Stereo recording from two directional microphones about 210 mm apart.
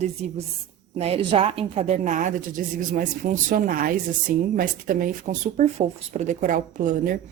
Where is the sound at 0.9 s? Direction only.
30° right (ahead or behind).